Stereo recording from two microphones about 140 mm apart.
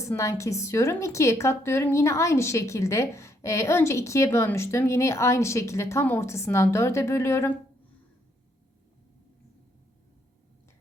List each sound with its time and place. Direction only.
0.0 s a woman's voice: 20° left (ahead or behind)